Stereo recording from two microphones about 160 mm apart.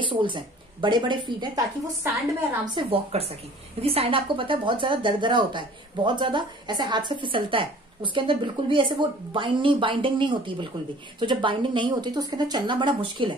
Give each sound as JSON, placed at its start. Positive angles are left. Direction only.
{"t": 0.0, "sound": "speech", "side_deg": -30}
{"t": 2.6, "sound": "speech", "side_deg": -25}
{"t": 3.1, "sound": "speech", "side_deg": -40}